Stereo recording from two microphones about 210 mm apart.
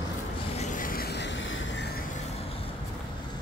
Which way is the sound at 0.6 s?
40° left (ahead or behind).